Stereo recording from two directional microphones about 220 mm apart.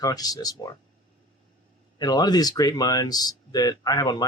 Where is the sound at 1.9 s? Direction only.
20° left (ahead or behind).